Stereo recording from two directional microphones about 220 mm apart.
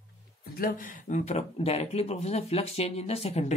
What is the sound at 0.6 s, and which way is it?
Speech, 40° left (ahead or behind).